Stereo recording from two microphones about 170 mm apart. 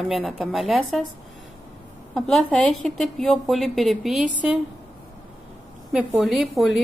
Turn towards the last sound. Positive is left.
turn(degrees=0)  # may be behind; listen again after turning